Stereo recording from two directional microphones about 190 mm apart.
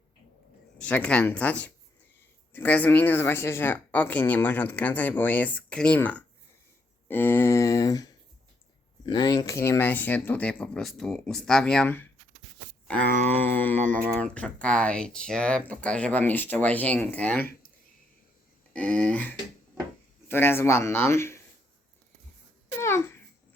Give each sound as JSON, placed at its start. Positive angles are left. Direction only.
{"t": 0.8, "sound": "speech", "side_deg": 5}
{"t": 13.7, "sound": "speech", "side_deg": -40}
{"t": 14.2, "sound": "speech", "side_deg": 5}
{"t": 18.7, "sound": "speech", "side_deg": 10}
{"t": 22.8, "sound": "a sound", "side_deg": 15}